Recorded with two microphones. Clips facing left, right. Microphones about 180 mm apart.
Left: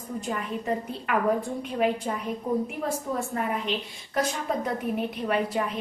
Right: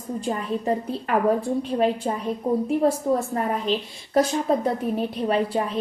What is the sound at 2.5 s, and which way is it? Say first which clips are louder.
A woman's voice: right 8 dB; 30° right (ahead or behind).